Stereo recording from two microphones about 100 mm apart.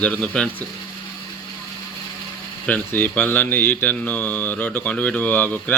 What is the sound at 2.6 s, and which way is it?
Speech, 15° left (ahead or behind).